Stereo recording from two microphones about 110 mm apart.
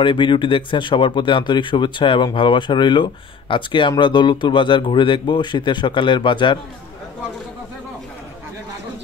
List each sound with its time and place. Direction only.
0.0 s speech: 50° left (ahead or behind)